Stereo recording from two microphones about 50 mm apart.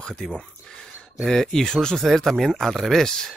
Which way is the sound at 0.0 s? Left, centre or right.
Centre.